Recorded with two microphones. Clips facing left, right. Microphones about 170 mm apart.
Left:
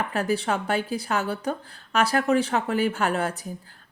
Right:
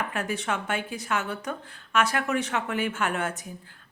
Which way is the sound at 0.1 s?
35° left (ahead or behind).